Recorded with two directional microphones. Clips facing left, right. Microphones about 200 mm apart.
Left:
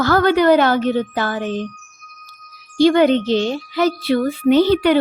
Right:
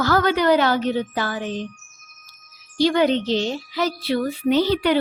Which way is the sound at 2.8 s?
55° left (ahead or behind).